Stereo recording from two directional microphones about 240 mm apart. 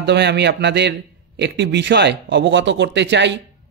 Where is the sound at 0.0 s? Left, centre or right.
Right.